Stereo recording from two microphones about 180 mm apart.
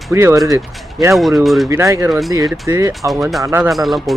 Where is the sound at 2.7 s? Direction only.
15° right (ahead or behind).